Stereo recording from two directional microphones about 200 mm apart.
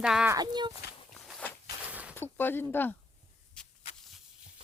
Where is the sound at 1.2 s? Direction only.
5° right (ahead or behind).